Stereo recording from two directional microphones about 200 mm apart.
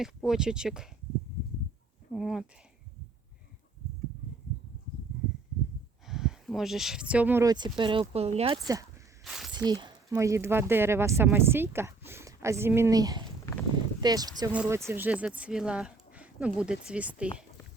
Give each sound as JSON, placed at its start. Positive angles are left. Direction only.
{"t": 0.0, "sound": "speech", "side_deg": 0}
{"t": 2.1, "sound": "speech", "side_deg": 0}
{"t": 6.1, "sound": "speech", "side_deg": 0}
{"t": 8.6, "sound": "speech", "side_deg": -15}
{"t": 9.2, "sound": "a sound", "side_deg": 0}
{"t": 9.6, "sound": "speech", "side_deg": -20}